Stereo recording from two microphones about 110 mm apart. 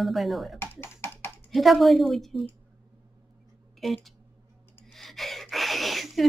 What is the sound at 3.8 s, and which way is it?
A woman's voice, centre (ahead or behind).